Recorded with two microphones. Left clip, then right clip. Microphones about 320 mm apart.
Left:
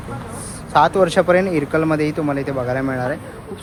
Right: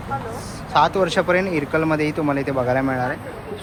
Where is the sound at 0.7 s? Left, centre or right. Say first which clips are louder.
Left 3 dB; centre.